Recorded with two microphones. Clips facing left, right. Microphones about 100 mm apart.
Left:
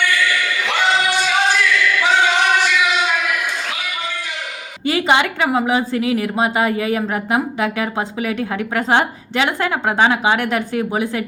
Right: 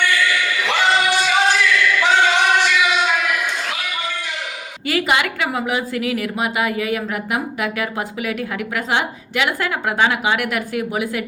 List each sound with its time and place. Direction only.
0.0 s choir: centre (ahead or behind)
4.9 s a woman's voice: 30° left (ahead or behind)